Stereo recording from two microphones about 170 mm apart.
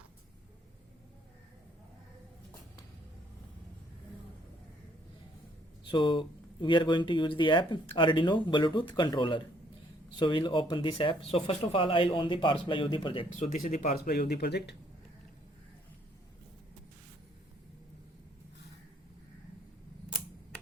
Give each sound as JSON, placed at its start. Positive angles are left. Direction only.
{"t": 5.9, "sound": "speech", "side_deg": 30}
{"t": 13.5, "sound": "speech", "side_deg": 50}
{"t": 13.9, "sound": "speech", "side_deg": 65}